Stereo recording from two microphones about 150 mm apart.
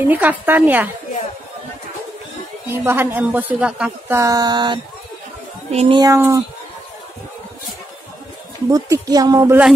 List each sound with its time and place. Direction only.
0.0 s speech: 10° right (ahead or behind)
2.7 s speech: 15° right (ahead or behind)
4.2 s speech: 25° right (ahead or behind)
5.7 s speech: 45° right (ahead or behind)
5.9 s speech: 25° right (ahead or behind)
8.6 s speech: 20° right (ahead or behind)